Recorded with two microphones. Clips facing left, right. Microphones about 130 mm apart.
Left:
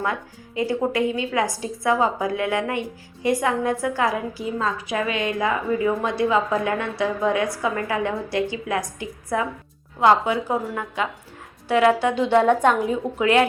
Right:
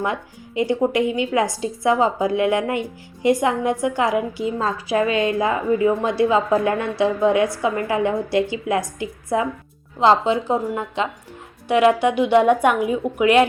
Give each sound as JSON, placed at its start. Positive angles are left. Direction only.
{"t": 0.0, "sound": "a woman's voice", "side_deg": -20}